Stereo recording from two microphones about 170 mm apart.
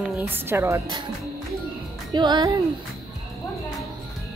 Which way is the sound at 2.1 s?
25° right (ahead or behind).